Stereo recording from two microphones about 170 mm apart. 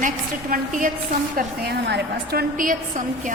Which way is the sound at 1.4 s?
75° right (ahead or behind).